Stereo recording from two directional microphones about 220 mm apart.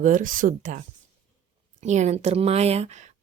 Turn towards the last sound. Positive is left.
turn(degrees=-30)  # may be behind; listen again after turning